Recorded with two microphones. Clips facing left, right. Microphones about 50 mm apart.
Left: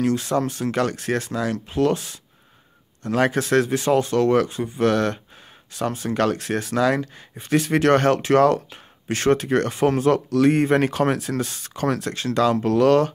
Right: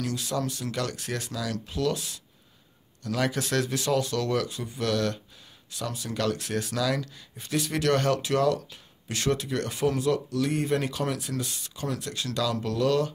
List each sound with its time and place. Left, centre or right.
0.0 s speech: left